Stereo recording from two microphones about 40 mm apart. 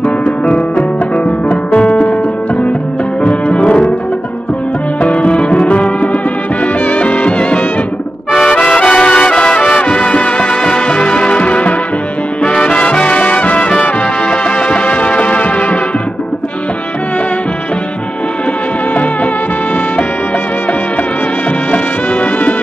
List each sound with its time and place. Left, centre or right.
0.2 s music: left
1.8 s music: left
3.3 s music: left
5.0 s music: left
8.5 s brass instrument: left
9.6 s music: left
10.6 s music: left
13.2 s brass instrument: left
14.3 s music: left
21.7 s music: left